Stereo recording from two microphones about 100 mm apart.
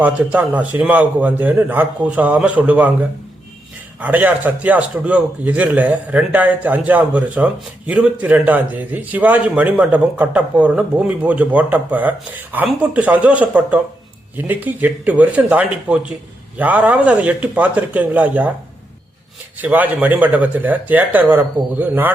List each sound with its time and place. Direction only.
0.0 s a man's voice: 15° right (ahead or behind)
19.5 s a man's voice: 15° right (ahead or behind)